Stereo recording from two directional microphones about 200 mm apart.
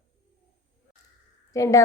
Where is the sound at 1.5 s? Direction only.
15° left (ahead or behind).